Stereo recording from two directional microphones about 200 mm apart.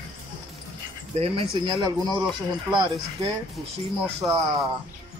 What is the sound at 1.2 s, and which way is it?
Speech, 25° right (ahead or behind).